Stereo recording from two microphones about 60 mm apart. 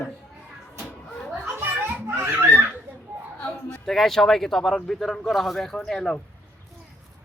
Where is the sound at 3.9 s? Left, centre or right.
Centre.